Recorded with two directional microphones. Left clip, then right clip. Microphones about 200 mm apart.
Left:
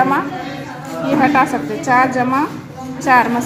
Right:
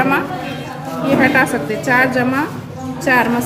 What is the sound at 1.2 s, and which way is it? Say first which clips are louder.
A woman's voice: left 1 dB; 20° left (ahead or behind).